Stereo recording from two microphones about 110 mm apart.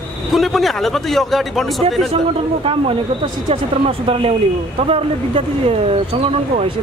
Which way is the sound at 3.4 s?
60° right (ahead or behind).